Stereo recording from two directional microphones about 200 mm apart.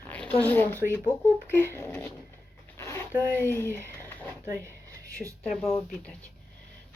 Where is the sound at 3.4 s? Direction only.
10° left (ahead or behind).